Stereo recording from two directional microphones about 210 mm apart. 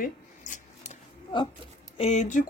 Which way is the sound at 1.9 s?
30° left (ahead or behind).